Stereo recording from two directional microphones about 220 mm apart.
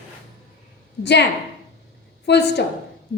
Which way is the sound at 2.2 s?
50° left (ahead or behind).